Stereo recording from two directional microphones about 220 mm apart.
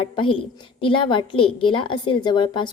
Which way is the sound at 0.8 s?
20° left (ahead or behind).